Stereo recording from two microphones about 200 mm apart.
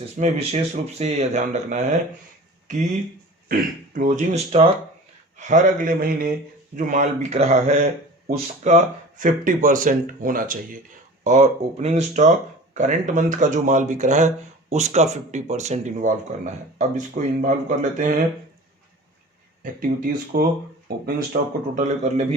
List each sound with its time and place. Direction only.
0.2 s speech: 30° right (ahead or behind)
3.5 s speech: 40° right (ahead or behind)
19.6 s speech: 45° right (ahead or behind)
21.8 s speech: 35° right (ahead or behind)